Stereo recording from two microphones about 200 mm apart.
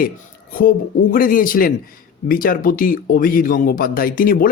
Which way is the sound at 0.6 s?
45° left (ahead or behind).